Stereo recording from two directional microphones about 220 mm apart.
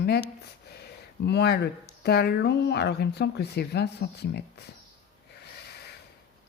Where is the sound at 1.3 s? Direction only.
50° left (ahead or behind).